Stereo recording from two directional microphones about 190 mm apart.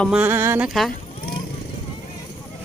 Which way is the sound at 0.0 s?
5° right (ahead or behind).